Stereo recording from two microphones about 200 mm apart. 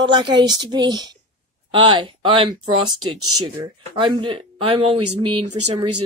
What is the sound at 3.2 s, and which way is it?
Speech, 90° right.